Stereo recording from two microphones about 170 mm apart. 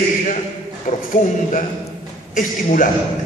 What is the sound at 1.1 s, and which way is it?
Speech, 50° left (ahead or behind).